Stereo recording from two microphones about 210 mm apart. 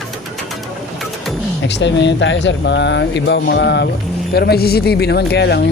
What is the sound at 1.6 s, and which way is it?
Speech, 55° left (ahead or behind).